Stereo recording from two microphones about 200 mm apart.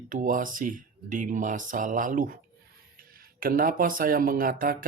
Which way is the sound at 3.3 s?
45° right (ahead or behind).